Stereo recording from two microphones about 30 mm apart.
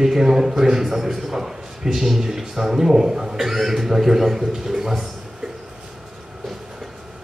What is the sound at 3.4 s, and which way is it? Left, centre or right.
A man's voice, centre.